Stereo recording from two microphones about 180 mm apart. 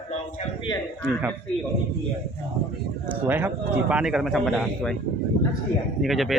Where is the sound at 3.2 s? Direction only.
10° right (ahead or behind).